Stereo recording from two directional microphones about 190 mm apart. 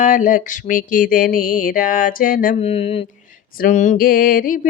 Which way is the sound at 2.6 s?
30° left (ahead or behind).